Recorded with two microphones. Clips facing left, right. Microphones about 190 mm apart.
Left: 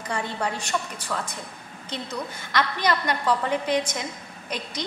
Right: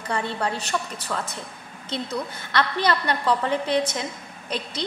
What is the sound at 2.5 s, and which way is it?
A woman's voice, 10° left (ahead or behind).